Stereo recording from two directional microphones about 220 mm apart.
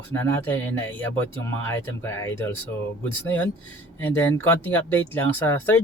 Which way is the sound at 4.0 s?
10° left (ahead or behind).